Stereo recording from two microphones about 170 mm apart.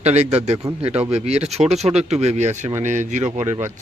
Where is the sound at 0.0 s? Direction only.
40° right (ahead or behind).